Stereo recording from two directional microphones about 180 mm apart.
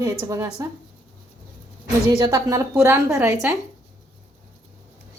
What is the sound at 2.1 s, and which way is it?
A woman's voice, 20° right (ahead or behind).